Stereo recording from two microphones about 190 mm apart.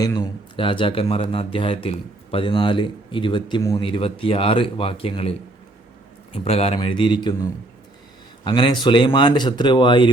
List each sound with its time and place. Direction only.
0.0 s speech: 20° left (ahead or behind)
8.4 s speech: 25° left (ahead or behind)